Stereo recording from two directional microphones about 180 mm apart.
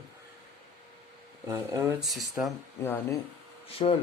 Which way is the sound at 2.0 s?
Centre (ahead or behind).